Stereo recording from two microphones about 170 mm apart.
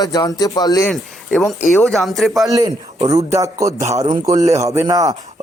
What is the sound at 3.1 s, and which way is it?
A man's voice, 20° right (ahead or behind).